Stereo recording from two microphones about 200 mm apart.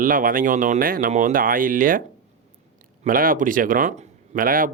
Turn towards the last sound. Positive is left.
turn(degrees=-45)  # may be behind; listen again after turning